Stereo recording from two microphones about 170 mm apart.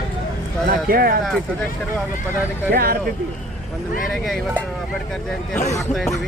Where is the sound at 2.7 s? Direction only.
60° right (ahead or behind).